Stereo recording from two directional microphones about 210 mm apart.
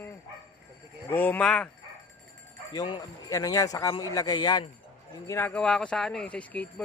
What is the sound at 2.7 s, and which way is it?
Speech, 20° left (ahead or behind).